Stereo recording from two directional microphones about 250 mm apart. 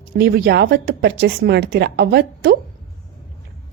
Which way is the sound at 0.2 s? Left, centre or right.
Right.